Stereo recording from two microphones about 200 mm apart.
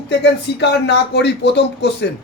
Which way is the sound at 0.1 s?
55° left (ahead or behind).